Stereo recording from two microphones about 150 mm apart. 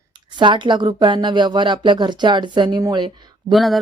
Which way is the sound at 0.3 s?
30° right (ahead or behind).